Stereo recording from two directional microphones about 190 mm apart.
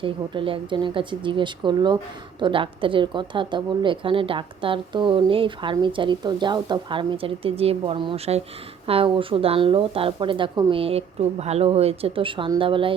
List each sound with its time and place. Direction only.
0.0 s a woman's voice: 25° right (ahead or behind)